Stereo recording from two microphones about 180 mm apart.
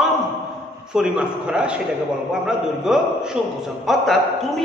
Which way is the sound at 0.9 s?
5° right (ahead or behind).